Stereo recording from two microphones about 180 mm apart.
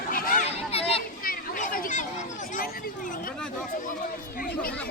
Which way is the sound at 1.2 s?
50° left (ahead or behind).